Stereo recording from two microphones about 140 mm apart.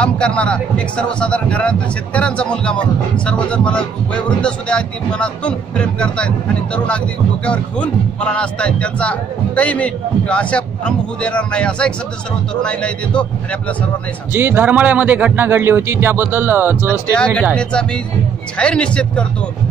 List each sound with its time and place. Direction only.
0.0 s speech: 10° left (ahead or behind)
14.3 s a man's voice: 15° right (ahead or behind)
17.1 s speech: 5° left (ahead or behind)